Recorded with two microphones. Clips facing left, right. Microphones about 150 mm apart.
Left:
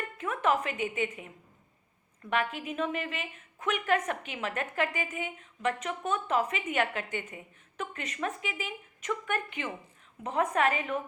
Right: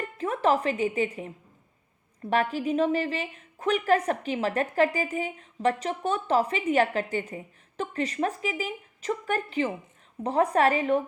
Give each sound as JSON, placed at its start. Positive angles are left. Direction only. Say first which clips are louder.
{"t": 0.0, "sound": "a woman's voice", "louder": "right 5 dB", "side_deg": -35}